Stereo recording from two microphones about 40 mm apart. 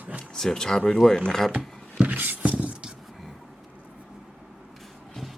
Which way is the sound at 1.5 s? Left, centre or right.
Right.